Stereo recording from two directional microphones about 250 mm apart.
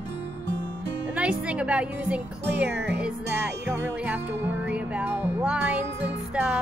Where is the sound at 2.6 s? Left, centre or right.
Right.